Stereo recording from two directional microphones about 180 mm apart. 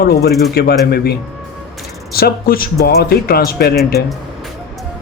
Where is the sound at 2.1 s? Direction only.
60° left (ahead or behind).